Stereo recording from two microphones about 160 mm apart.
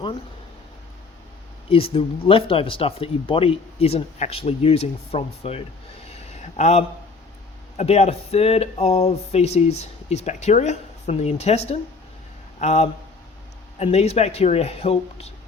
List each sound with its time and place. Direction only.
1.7 s speech: 35° left (ahead or behind)
6.1 s a sound: 45° left (ahead or behind)
7.8 s speech: 40° left (ahead or behind)